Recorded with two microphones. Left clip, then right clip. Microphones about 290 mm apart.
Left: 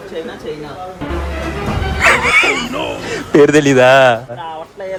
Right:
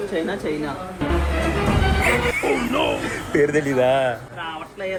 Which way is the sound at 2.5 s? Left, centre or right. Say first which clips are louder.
Left 3 dB; centre.